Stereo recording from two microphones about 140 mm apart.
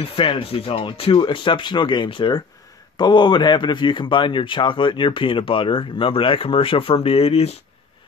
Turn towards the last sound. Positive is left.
turn(degrees=45)  # may be behind; listen again after turning